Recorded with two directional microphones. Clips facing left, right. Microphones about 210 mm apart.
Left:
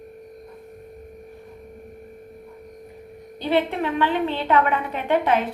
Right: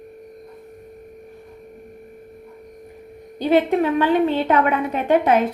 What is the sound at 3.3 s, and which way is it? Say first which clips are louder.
A woman's voice: right 5 dB; 45° right (ahead or behind).